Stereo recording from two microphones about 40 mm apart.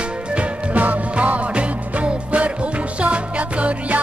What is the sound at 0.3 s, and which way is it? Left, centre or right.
Music, right.